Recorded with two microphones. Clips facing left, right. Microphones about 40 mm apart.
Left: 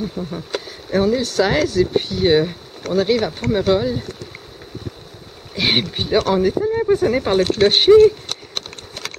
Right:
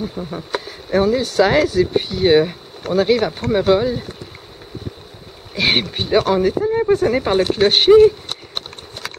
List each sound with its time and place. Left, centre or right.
0.0 s speech: centre
5.5 s speech: centre
7.9 s speech: right